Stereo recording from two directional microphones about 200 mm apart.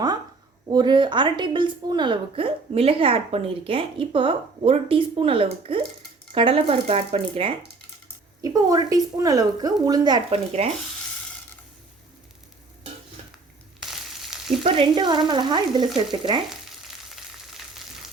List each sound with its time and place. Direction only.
0.7 s a woman's voice: 20° right (ahead or behind)
8.4 s a woman's voice: 20° right (ahead or behind)
14.3 s frying: centre (ahead or behind)
14.6 s a woman's voice: 25° right (ahead or behind)